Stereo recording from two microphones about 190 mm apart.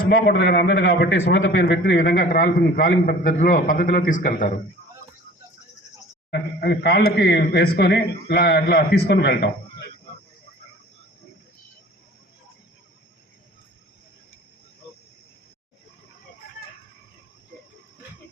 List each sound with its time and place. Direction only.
0.1 s speech: 60° left (ahead or behind); by 1.8 s 75° left (ahead or behind)
1.8 s a man's voice: 50° left (ahead or behind)
6.3 s speech: 55° left (ahead or behind)